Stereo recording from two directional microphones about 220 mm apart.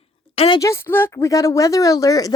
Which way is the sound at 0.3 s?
20° left (ahead or behind).